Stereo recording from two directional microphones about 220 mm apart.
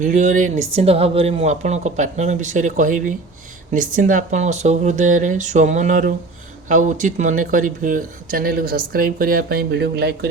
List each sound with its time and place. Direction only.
0.0 s speech: 35° right (ahead or behind)